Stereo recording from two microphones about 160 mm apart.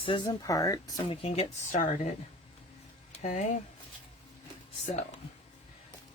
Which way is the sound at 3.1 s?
50° left (ahead or behind).